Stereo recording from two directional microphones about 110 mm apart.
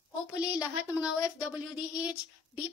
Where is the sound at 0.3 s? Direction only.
10° right (ahead or behind).